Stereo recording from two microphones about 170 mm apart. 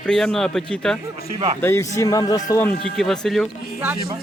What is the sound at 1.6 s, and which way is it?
A man's voice, 15° left (ahead or behind).